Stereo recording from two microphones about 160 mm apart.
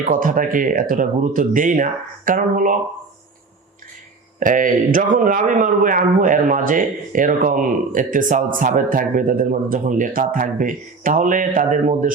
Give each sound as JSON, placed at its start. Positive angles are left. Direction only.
{"t": 0.0, "sound": "a man's voice", "side_deg": -60}
{"t": 4.4, "sound": "a man's voice", "side_deg": -55}